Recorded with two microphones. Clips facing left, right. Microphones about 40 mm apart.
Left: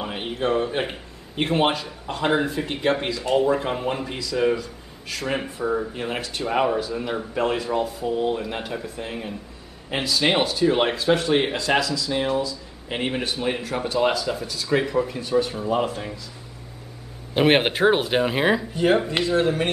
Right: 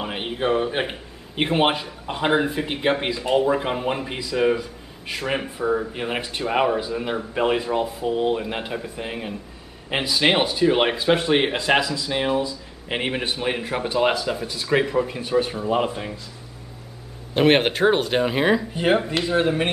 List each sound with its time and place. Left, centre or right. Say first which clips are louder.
0.0 s a man's voice: right 1 dB; centre
5.4 s speech: right 2 dB; centre; by 14.8 s right
14.8 s speech: right 2 dB; centre
15.0 s speech: even; right
17.3 s speech: right 1 dB; centre
19.2 s speech: even; centre